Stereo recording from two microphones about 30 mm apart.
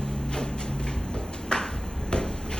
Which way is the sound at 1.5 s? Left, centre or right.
Left.